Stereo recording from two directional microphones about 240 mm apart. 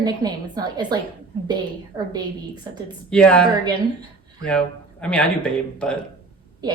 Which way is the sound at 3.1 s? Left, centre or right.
Centre.